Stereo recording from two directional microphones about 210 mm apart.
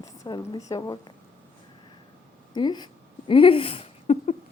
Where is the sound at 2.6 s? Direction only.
20° left (ahead or behind).